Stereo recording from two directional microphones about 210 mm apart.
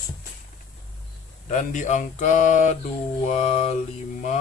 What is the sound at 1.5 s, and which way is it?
A man's voice, 35° left (ahead or behind).